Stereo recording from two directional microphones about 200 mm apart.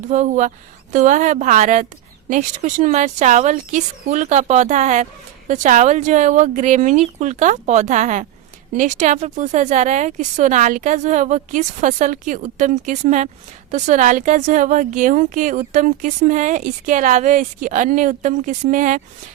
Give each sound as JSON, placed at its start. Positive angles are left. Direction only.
{"t": 0.1, "sound": "speech", "side_deg": -35}